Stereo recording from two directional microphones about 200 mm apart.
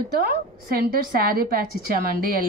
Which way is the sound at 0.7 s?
50° right (ahead or behind).